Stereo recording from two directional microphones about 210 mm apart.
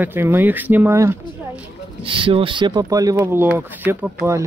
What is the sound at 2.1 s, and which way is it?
Speech, 25° right (ahead or behind).